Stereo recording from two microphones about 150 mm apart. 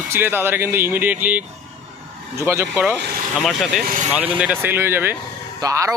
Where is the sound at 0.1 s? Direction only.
15° right (ahead or behind).